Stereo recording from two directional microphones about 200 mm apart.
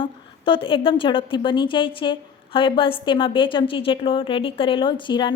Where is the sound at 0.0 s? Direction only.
25° left (ahead or behind).